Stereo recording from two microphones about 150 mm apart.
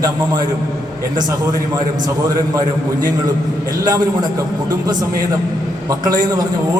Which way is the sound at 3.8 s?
25° right (ahead or behind).